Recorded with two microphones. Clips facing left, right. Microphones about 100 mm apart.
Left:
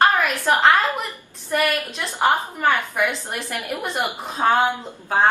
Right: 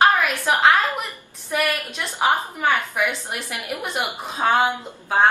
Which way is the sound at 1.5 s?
10° right (ahead or behind).